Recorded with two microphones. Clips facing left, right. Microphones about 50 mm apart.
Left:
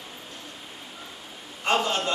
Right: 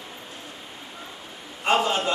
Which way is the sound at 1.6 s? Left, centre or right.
Centre.